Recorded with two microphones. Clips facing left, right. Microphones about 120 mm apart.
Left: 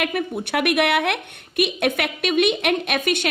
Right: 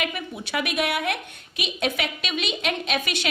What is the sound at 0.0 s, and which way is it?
A woman's voice, 55° left (ahead or behind).